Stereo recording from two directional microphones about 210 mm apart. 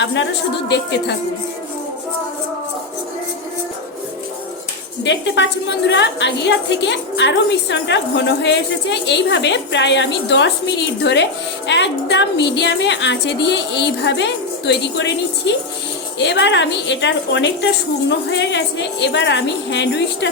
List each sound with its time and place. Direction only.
0.0 s a woman's voice: 55° left (ahead or behind)
5.0 s a woman's voice: 55° left (ahead or behind)